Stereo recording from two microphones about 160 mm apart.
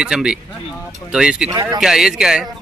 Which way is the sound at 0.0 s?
5° right (ahead or behind).